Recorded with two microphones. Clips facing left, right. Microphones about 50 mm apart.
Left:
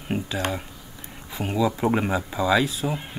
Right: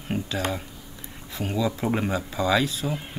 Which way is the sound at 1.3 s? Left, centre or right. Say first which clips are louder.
Left 3 dB; centre.